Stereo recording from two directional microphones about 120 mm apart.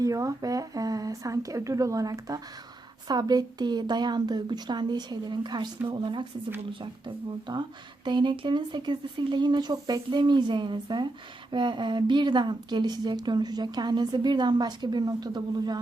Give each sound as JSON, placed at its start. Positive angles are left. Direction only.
{"t": 0.0, "sound": "a woman's voice", "side_deg": -30}
{"t": 7.5, "sound": "a woman's voice", "side_deg": -40}